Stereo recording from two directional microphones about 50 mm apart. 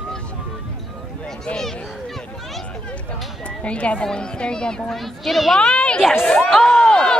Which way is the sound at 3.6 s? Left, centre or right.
Left.